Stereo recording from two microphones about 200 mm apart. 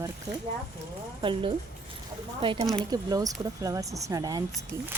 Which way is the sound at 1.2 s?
25° right (ahead or behind).